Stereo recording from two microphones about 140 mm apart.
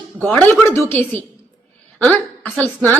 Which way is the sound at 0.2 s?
10° left (ahead or behind).